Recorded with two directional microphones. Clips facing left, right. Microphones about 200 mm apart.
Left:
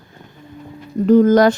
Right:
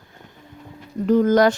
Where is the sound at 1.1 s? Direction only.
35° left (ahead or behind).